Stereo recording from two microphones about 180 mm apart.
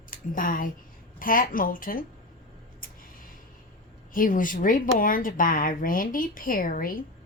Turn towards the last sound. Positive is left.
turn(degrees=50)  # may be behind; listen again after turning